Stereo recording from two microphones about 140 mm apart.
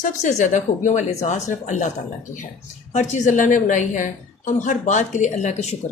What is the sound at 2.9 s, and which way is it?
A woman's voice, 60° left (ahead or behind).